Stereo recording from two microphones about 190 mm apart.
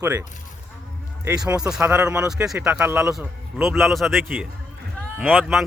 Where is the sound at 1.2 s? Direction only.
5° right (ahead or behind).